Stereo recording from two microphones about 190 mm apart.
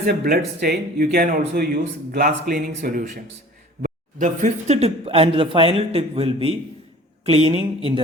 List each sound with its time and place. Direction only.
0.0 s speech: 55° right (ahead or behind); by 8.0 s 30° right (ahead or behind)